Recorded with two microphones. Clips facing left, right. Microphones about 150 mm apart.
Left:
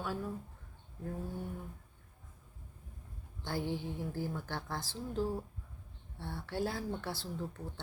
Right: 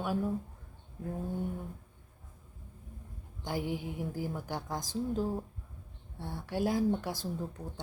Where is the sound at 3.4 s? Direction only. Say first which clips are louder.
Right 2 dB; 15° right (ahead or behind).